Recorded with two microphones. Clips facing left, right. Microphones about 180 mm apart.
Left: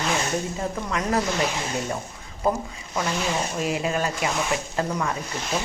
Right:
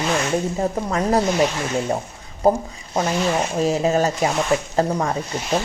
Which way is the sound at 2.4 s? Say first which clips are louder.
Right 7 dB; 40° right (ahead or behind).